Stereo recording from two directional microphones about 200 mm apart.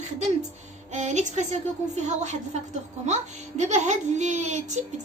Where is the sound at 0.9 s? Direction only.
35° right (ahead or behind).